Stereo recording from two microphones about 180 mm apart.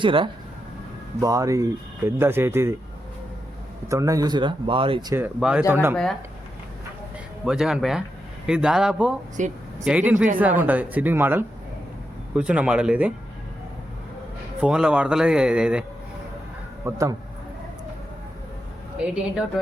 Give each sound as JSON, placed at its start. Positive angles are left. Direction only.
{"t": 0.0, "sound": "speech", "side_deg": -30}
{"t": 1.2, "sound": "speech", "side_deg": -20}
{"t": 3.8, "sound": "speech", "side_deg": -15}
{"t": 5.1, "sound": "speech", "side_deg": -10}
{"t": 7.4, "sound": "a man's voice", "side_deg": -5}
{"t": 9.4, "sound": "speech", "side_deg": -45}
{"t": 9.8, "sound": "speech", "side_deg": -5}
{"t": 14.6, "sound": "a man's voice", "side_deg": -5}
{"t": 16.8, "sound": "speech", "side_deg": -15}
{"t": 19.0, "sound": "a man's voice", "side_deg": -5}